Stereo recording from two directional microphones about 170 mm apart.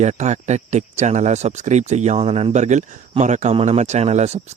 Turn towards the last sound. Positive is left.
turn(degrees=-40)  # may be behind; listen again after turning